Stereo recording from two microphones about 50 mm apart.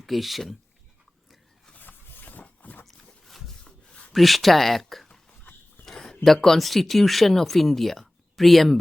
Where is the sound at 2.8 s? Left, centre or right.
Centre.